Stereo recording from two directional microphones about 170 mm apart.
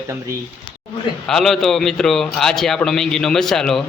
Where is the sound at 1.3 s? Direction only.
Centre (ahead or behind).